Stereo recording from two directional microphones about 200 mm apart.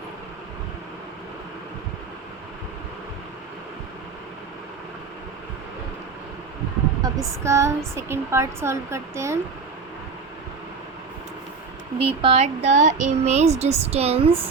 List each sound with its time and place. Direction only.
7.0 s a sound: 15° right (ahead or behind)
7.9 s a woman's voice: 15° right (ahead or behind)
11.9 s speech: 30° right (ahead or behind)